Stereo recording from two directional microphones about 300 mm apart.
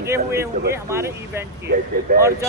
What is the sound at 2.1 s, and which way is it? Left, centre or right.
Speech, right.